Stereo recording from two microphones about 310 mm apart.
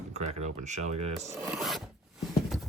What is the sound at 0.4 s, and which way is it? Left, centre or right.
Speech, right.